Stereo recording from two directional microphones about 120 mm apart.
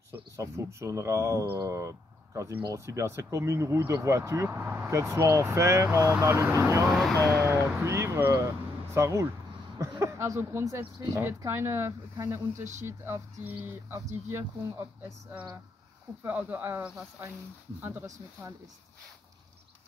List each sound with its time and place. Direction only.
0.1 s speech: 25° right (ahead or behind)
6.9 s speech: centre (ahead or behind)
7.4 s speech: 20° right (ahead or behind)